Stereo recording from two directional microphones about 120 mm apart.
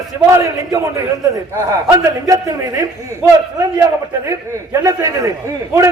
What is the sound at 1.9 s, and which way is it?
Speech, 30° right (ahead or behind).